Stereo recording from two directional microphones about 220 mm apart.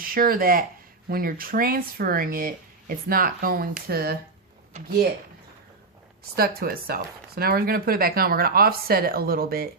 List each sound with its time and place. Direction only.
0.0 s speech: 40° right (ahead or behind)
6.3 s speech: 45° right (ahead or behind)